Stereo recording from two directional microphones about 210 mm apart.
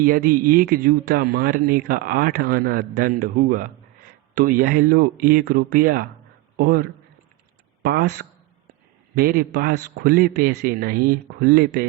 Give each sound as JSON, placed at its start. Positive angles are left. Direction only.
{"t": 0.0, "sound": "speech", "side_deg": -45}